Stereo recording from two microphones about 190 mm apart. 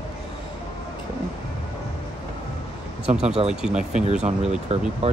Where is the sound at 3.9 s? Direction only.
40° right (ahead or behind).